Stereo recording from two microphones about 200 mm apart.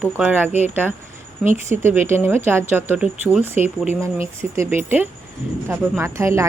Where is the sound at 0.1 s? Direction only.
5° right (ahead or behind).